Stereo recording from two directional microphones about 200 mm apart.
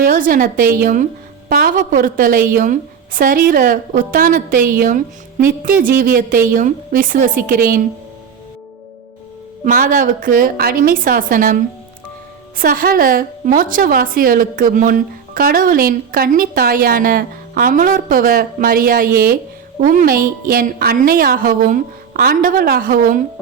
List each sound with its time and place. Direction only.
0.0 s a woman's voice: 45° right (ahead or behind)
9.6 s a woman's voice: 40° right (ahead or behind)
12.5 s a woman's voice: 45° right (ahead or behind)